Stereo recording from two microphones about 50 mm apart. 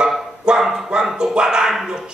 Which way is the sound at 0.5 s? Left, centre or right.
Centre.